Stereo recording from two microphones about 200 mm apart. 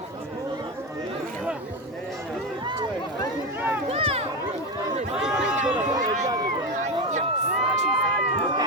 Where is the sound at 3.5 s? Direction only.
10° right (ahead or behind).